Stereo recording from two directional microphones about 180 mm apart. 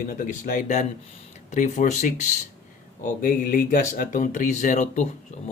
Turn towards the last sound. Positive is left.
turn(degrees=40)  # may be behind; listen again after turning